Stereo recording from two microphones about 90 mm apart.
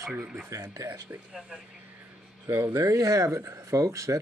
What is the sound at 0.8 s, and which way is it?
Speech, 20° right (ahead or behind).